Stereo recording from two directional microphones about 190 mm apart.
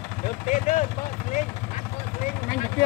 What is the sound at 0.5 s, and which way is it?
Speech, 40° left (ahead or behind).